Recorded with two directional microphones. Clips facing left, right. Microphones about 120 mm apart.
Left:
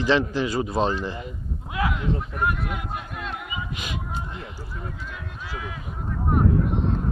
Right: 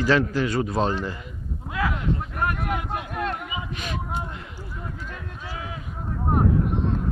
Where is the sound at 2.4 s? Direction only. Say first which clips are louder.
Even; 55° right (ahead or behind).